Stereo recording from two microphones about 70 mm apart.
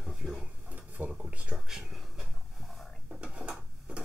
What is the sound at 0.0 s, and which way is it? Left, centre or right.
Drawer open or close, centre.